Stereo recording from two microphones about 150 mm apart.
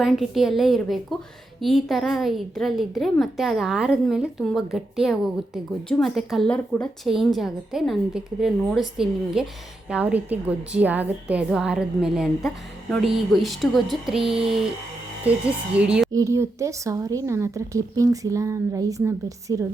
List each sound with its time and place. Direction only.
0.0 s a woman's voice: centre (ahead or behind)
14.2 s a sound: 35° right (ahead or behind)
15.2 s a woman's voice: 10° right (ahead or behind)
16.1 s speech: 20° right (ahead or behind)